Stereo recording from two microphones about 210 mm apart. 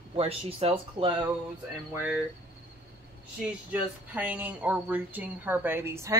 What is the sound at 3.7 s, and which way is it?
Speech, 5° right (ahead or behind).